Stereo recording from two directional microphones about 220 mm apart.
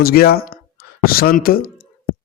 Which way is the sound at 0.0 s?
45° left (ahead or behind).